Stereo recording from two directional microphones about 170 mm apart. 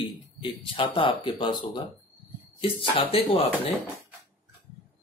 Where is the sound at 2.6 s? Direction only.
30° left (ahead or behind).